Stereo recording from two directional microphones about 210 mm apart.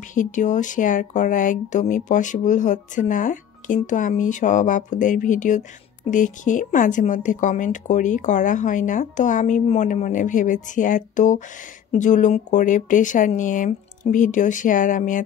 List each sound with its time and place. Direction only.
0.1 s speech: 40° left (ahead or behind)